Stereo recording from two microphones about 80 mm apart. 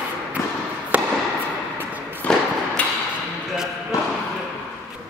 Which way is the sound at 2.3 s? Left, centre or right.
Centre.